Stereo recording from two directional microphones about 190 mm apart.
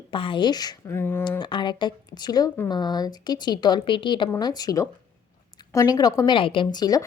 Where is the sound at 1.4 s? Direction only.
25° left (ahead or behind).